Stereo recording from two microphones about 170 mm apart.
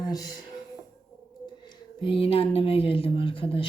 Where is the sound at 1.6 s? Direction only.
25° left (ahead or behind).